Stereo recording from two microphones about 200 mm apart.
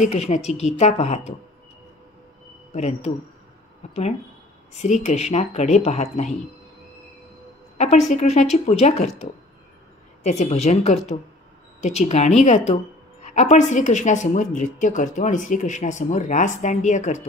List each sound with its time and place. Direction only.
0.0 s speech: 35° left (ahead or behind)
2.7 s speech: 35° left (ahead or behind)
7.7 s a sound: 35° left (ahead or behind)
8.1 s speech: 35° left (ahead or behind)